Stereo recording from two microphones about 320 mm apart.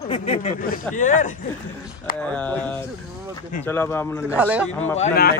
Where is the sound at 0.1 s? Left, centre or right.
Centre.